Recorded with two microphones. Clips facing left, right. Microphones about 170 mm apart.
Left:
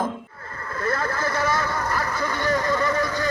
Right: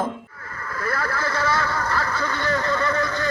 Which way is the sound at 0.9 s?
20° left (ahead or behind).